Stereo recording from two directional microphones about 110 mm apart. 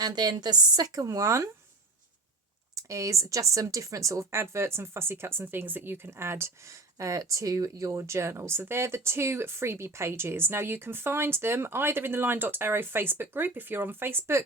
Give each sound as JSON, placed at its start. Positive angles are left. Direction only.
{"t": 0.0, "sound": "a woman's voice", "side_deg": -40}
{"t": 2.7, "sound": "speech", "side_deg": -30}